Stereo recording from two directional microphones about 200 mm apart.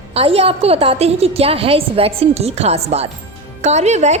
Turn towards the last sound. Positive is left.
turn(degrees=-35)  # may be behind; listen again after turning